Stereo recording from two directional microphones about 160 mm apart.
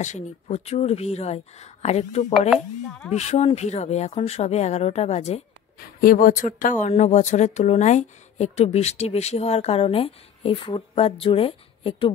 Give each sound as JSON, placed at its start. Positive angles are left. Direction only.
{"t": 0.0, "sound": "speech", "side_deg": 45}
{"t": 5.8, "sound": "speech", "side_deg": 65}